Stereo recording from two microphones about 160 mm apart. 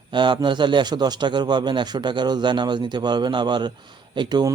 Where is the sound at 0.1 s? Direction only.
30° right (ahead or behind).